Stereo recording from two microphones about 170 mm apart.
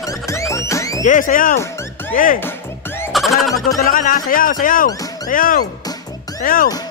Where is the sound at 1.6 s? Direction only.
15° left (ahead or behind).